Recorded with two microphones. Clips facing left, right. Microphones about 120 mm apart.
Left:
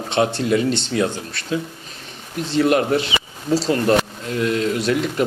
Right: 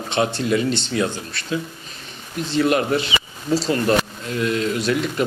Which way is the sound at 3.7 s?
45° left (ahead or behind).